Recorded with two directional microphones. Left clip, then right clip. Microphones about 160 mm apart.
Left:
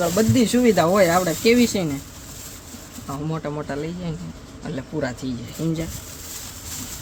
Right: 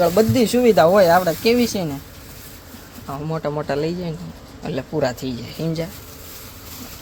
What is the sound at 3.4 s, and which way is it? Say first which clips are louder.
Speech: right 6 dB; 15° right (ahead or behind).